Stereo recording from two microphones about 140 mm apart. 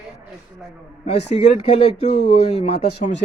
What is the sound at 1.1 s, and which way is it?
A man's voice, 55° left (ahead or behind).